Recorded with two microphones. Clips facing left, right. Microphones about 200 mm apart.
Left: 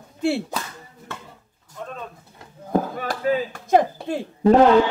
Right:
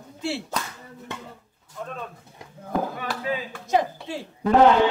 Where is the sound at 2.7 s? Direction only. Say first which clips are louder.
Left 4 dB; 45° left (ahead or behind).